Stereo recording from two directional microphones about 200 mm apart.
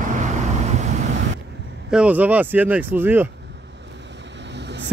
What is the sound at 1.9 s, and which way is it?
Speech, 5° right (ahead or behind).